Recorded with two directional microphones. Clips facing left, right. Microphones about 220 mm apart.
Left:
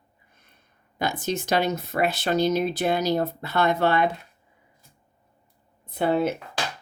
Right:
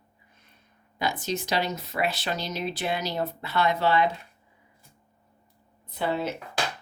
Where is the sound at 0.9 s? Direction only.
50° left (ahead or behind).